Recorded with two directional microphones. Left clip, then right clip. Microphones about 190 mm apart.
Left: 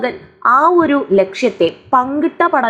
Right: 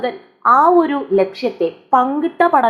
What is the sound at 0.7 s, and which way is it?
A woman's voice, 5° left (ahead or behind).